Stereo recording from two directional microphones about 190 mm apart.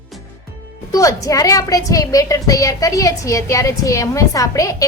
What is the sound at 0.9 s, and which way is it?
A woman's voice, 15° left (ahead or behind).